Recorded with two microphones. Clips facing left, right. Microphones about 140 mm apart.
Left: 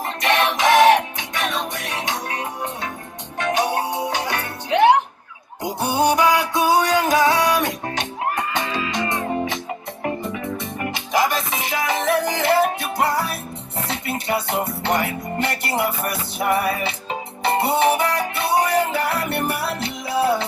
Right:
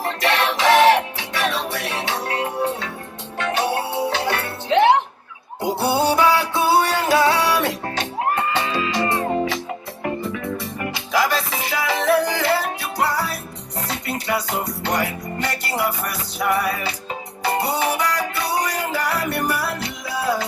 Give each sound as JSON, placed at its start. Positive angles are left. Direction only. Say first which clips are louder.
{"t": 0.2, "sound": "music", "louder": "left 2 dB", "side_deg": 15}
{"t": 3.5, "sound": "music", "louder": "left 1 dB", "side_deg": 15}